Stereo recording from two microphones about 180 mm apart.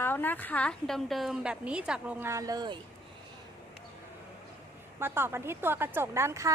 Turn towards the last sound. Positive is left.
turn(degrees=-15)  # may be behind; listen again after turning